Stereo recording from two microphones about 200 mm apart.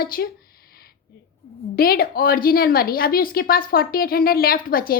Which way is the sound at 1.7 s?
50° left (ahead or behind).